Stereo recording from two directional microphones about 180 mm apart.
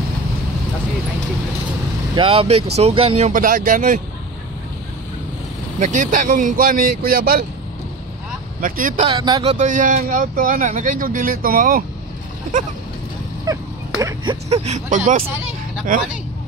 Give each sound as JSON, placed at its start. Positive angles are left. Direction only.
{"t": 2.1, "sound": "speech", "side_deg": -30}
{"t": 5.8, "sound": "speech", "side_deg": -45}
{"t": 8.5, "sound": "speech", "side_deg": -50}
{"t": 9.1, "sound": "speech", "side_deg": -20}
{"t": 9.4, "sound": "speech", "side_deg": -40}
{"t": 13.5, "sound": "a sound", "side_deg": -20}
{"t": 14.5, "sound": "speech", "side_deg": -35}